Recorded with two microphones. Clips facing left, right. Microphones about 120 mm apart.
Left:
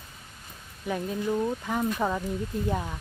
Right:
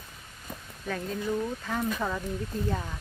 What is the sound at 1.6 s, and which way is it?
Speech, 15° left (ahead or behind).